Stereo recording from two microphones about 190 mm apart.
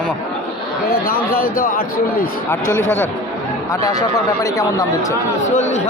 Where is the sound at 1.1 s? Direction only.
50° left (ahead or behind).